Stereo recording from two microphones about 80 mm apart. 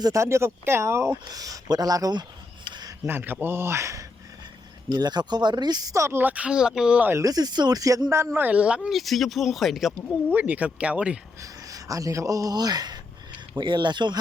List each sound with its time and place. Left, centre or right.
0.0 s speech: right
1.3 s speech: right
2.6 s a sound: right
3.1 s speech: right
4.9 s speech: right
5.9 s speech: right; by 7.0 s centre
7.2 s speech: right
8.1 s speech: right; by 8.9 s centre
8.9 s speech: centre
10.2 s speech: right
11.7 s speech: right
13.6 s speech: right